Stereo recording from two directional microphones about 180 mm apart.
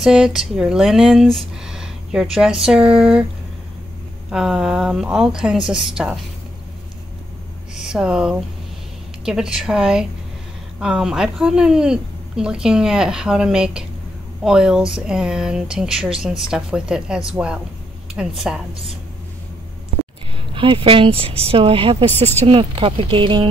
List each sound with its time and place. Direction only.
0.0 s speech: 5° right (ahead or behind)
4.3 s speech: 5° right (ahead or behind)
7.7 s speech: 5° right (ahead or behind)
20.5 s a woman's voice: 30° right (ahead or behind)